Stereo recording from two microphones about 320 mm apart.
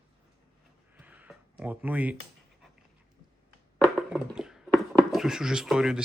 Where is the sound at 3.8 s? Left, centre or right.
Centre.